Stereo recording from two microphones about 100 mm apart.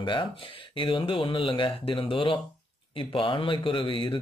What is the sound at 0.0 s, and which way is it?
Speech, 55° left (ahead or behind).